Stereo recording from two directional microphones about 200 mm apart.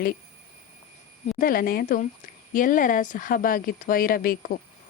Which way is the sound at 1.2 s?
45° left (ahead or behind).